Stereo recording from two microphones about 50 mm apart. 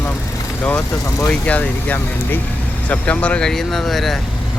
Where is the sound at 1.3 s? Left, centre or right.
Left.